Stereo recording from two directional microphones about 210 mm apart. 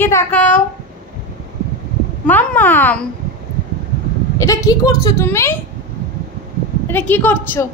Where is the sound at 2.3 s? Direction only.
10° left (ahead or behind).